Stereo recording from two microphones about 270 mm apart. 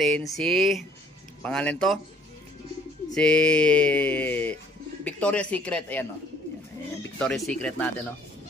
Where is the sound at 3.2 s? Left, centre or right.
Centre.